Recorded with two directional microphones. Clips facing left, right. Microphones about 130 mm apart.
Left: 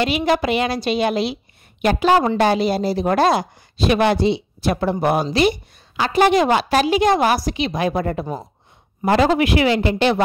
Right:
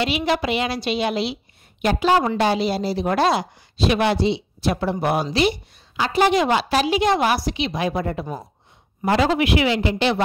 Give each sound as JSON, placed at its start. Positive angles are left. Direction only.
{"t": 0.0, "sound": "speech", "side_deg": 45}